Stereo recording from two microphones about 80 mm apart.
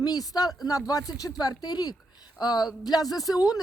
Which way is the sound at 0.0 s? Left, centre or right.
Left.